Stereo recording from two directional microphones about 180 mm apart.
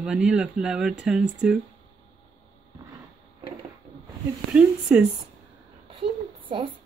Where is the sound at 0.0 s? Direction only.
5° right (ahead or behind).